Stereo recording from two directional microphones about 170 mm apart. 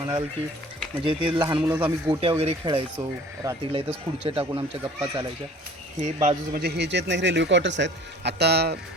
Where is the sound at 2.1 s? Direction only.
35° right (ahead or behind).